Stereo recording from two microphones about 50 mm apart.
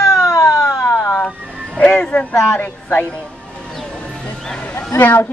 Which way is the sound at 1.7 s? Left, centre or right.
Left.